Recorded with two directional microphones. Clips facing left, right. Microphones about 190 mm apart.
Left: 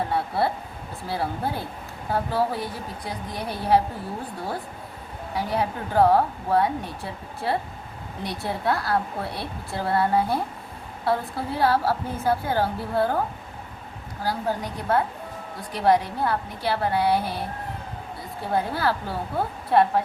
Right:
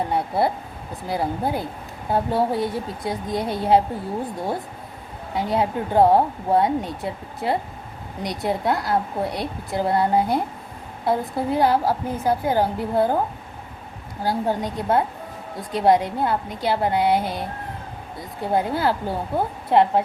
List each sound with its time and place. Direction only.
0.1 s speech: 20° right (ahead or behind)
5.3 s speech: 20° right (ahead or behind)
14.3 s speech: 20° right (ahead or behind)
18.5 s speech: 20° right (ahead or behind)